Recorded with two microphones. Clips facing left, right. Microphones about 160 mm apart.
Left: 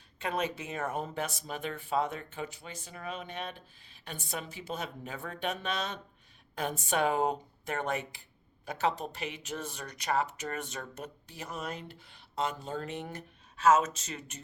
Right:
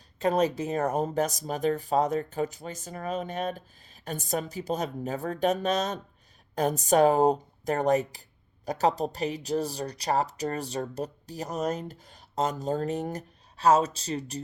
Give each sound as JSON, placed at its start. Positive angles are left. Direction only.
{"t": 0.2, "sound": "speech", "side_deg": -40}